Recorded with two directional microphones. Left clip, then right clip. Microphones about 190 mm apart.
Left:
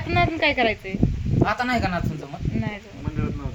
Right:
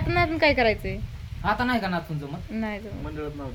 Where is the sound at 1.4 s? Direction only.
20° left (ahead or behind).